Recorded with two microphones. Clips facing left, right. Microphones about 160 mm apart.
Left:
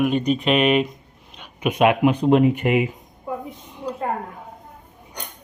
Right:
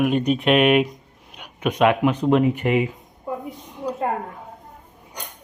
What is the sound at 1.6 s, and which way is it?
Speech, 10° left (ahead or behind).